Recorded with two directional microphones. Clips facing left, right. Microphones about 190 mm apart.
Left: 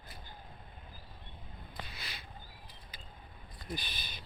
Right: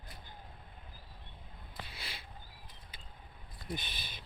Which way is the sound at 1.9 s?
30° right (ahead or behind).